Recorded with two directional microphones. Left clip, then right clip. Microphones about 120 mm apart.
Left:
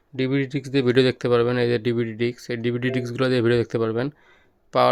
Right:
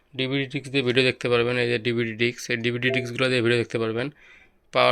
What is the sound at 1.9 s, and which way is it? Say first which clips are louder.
Speech: even; 40° left (ahead or behind).